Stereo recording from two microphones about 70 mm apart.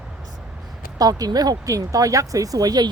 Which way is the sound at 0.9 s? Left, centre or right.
Right.